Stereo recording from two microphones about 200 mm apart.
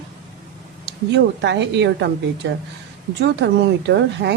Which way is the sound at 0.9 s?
60° right (ahead or behind).